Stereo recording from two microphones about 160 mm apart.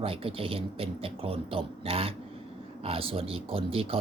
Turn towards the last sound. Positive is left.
turn(degrees=-35)  # may be behind; listen again after turning